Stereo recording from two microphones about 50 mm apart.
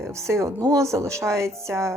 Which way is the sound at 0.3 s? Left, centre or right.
Right.